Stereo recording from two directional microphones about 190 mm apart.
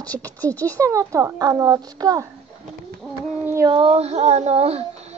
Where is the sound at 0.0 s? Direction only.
10° left (ahead or behind).